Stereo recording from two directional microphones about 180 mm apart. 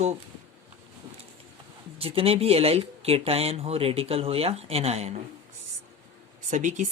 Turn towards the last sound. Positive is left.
turn(degrees=-40)  # may be behind; listen again after turning